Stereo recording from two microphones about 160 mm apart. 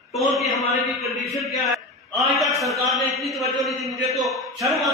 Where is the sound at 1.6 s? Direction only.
Centre (ahead or behind).